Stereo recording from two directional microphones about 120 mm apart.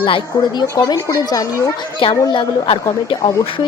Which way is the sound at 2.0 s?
50° left (ahead or behind).